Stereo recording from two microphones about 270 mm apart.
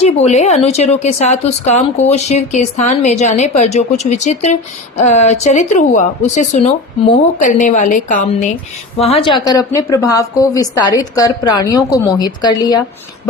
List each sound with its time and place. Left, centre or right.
0.0 s a woman's voice: left